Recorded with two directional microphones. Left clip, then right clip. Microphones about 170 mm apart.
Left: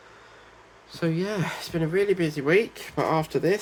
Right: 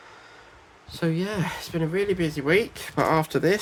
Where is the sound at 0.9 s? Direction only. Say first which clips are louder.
Even; 10° right (ahead or behind).